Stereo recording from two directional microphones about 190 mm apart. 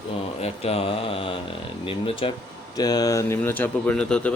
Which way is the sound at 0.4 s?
30° left (ahead or behind).